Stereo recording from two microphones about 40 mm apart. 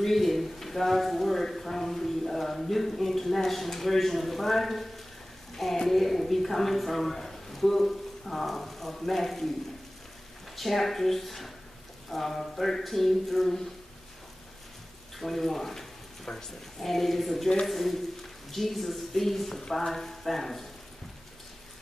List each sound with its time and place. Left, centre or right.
0.0 s a sound: centre
5.9 s a woman's voice: centre
10.5 s speech: centre
15.1 s speech: centre
16.3 s speech: centre
16.8 s speech: centre